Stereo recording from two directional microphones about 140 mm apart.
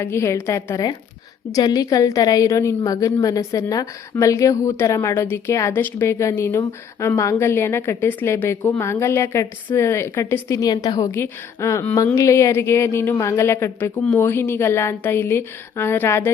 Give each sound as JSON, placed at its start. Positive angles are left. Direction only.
{"t": 0.0, "sound": "a woman's voice", "side_deg": 20}